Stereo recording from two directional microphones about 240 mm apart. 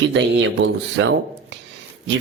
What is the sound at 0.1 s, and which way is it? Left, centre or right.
A man's voice, right.